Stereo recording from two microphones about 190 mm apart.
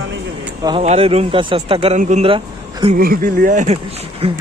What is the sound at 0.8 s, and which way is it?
Speech, 30° right (ahead or behind).